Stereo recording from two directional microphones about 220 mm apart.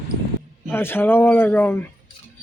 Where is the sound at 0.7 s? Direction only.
10° left (ahead or behind).